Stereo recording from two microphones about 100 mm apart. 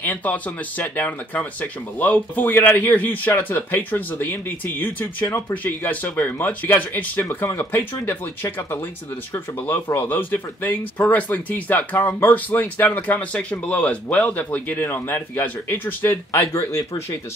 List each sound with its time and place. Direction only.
0.0 s speech: 15° left (ahead or behind); by 17.2 s 30° left (ahead or behind)